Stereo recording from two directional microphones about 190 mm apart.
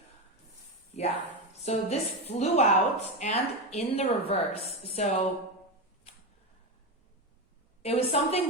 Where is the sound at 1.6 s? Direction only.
35° left (ahead or behind).